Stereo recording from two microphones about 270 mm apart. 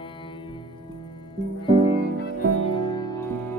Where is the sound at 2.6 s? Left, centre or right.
Centre.